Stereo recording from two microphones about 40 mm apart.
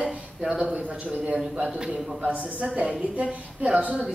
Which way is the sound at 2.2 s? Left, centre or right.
Right.